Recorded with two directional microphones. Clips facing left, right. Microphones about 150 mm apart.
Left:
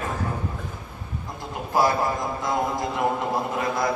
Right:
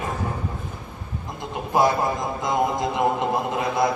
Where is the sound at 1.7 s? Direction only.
20° right (ahead or behind).